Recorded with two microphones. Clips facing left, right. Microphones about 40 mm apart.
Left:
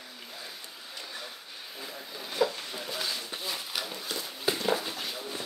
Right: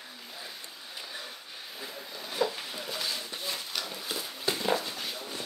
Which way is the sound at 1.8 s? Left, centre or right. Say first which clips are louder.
Even; centre.